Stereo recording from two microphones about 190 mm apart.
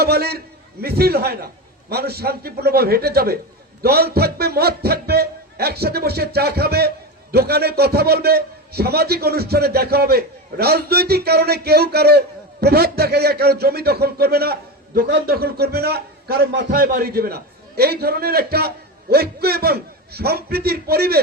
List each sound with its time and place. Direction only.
0.0 s a man's voice: 55° right (ahead or behind)